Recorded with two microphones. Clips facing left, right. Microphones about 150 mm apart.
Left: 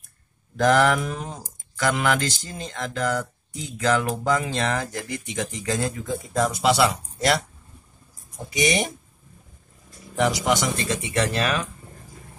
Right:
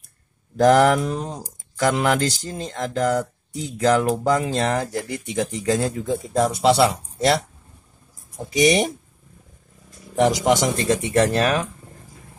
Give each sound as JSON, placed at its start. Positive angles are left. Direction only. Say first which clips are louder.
{"t": 0.6, "sound": "speech", "louder": "right 4 dB", "side_deg": -35}
{"t": 10.1, "sound": "speech", "louder": "right 4 dB", "side_deg": -45}